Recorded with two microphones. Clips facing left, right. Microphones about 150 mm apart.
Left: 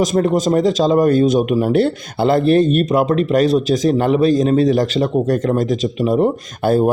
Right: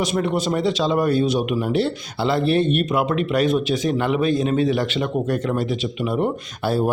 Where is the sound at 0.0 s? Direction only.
45° left (ahead or behind).